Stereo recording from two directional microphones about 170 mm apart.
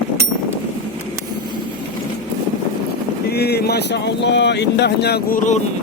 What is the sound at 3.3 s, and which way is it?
Speech, 70° left (ahead or behind).